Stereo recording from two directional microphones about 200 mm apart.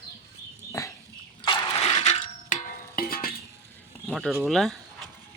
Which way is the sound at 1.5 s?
30° left (ahead or behind).